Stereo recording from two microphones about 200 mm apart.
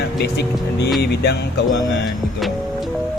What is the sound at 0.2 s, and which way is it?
A man's voice, 55° left (ahead or behind).